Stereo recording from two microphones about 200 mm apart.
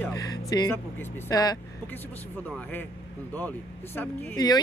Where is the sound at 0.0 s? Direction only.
15° left (ahead or behind).